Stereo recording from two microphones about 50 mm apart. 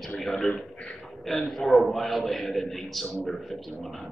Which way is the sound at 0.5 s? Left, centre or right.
Left.